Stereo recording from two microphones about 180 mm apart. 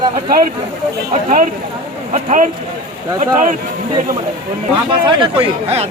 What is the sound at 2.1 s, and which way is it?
Speech, 45° right (ahead or behind).